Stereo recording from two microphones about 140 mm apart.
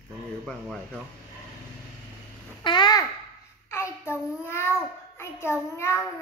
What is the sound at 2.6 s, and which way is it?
Babbling, 35° left (ahead or behind).